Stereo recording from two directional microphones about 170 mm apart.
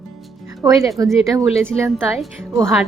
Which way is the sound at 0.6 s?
20° right (ahead or behind).